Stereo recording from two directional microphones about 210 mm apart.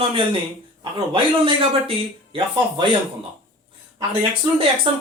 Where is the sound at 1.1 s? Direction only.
25° right (ahead or behind).